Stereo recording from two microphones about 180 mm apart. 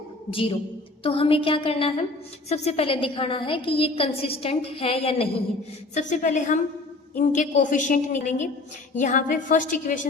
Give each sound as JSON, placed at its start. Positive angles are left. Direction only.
{"t": 0.3, "sound": "a woman's voice", "side_deg": 30}
{"t": 5.9, "sound": "a woman's voice", "side_deg": 45}